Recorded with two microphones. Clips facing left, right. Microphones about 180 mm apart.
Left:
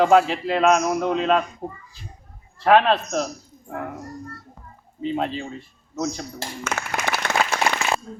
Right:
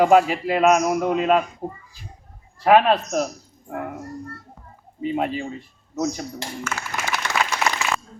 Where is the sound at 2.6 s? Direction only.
10° right (ahead or behind).